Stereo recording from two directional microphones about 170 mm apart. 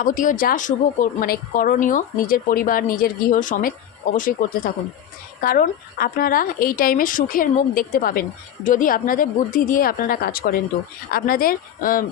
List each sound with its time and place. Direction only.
0.0 s speech: 50° left (ahead or behind)